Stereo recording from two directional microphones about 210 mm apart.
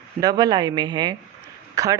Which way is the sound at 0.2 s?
20° right (ahead or behind).